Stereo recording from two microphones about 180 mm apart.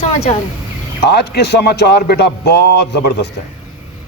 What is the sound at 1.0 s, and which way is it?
Speech, 65° left (ahead or behind).